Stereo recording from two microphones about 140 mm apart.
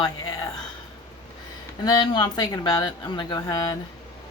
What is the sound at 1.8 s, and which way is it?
A woman's voice, 30° left (ahead or behind).